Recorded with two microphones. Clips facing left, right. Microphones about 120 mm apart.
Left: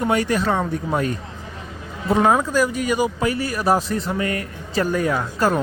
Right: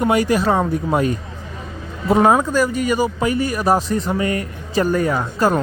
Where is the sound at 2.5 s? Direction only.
Centre (ahead or behind).